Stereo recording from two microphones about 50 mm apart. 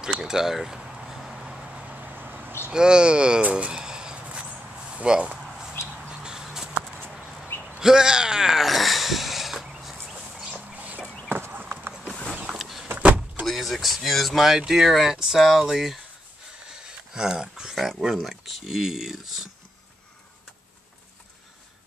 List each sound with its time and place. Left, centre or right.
0.2 s a sound: centre
1.9 s vehicle: right
2.1 s a sound: right
2.7 s speech: centre
3.5 s a sound: centre
7.8 s speech: centre
10.1 s chicken: right
11.5 s clip-clop: right
12.5 s vehicle: centre
12.9 s vehicle: right
13.5 s speech: centre
17.1 s a sound: centre
18.1 s speech: centre